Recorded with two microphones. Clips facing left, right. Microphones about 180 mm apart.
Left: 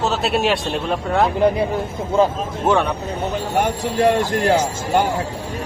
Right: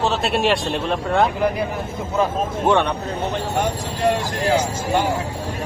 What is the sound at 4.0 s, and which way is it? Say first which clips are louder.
Speech: left 4 dB; 55° left (ahead or behind).